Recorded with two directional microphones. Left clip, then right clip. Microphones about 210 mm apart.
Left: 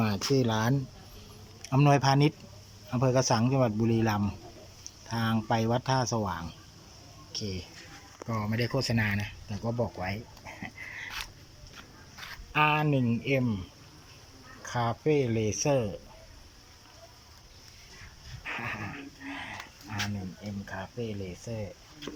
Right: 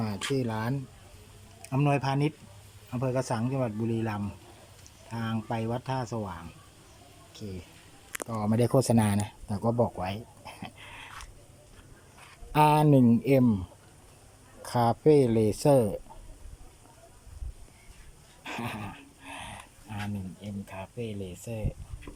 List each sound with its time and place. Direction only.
0.0 s speech: 5° right (ahead or behind)
8.3 s speech: 15° right (ahead or behind)
12.5 s speech: 20° right (ahead or behind)
14.6 s speech: 20° right (ahead or behind)
18.4 s dog: 20° right (ahead or behind)
20.4 s speech: 10° right (ahead or behind)